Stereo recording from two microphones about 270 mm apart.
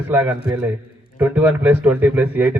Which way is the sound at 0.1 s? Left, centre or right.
Centre.